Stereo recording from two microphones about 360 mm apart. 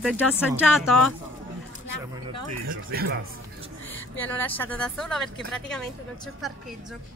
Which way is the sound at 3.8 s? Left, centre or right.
Centre.